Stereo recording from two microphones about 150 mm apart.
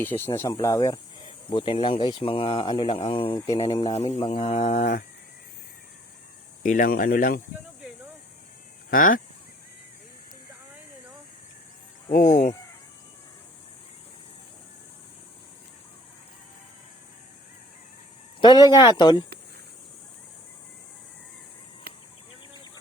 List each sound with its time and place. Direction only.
0.0 s speech: 15° left (ahead or behind)
1.5 s speech: 35° left (ahead or behind)
3.4 s speech: 25° left (ahead or behind)
3.9 s speech: 50° left (ahead or behind)
6.6 s speech: 60° left (ahead or behind)
8.9 s goose: 65° left (ahead or behind)
12.1 s speech: 50° left (ahead or behind)
18.3 s speech: 30° left (ahead or behind)
21.9 s cricket: 80° right